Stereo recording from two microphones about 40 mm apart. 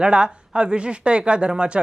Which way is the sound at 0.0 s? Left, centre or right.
Right.